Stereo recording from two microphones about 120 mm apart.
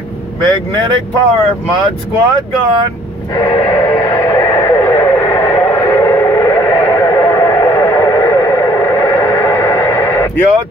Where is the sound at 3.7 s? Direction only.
25° left (ahead or behind).